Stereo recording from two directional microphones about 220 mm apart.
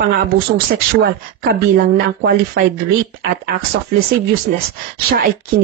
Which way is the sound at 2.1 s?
45° right (ahead or behind).